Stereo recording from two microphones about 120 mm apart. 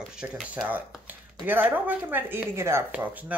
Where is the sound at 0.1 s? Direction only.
5° right (ahead or behind).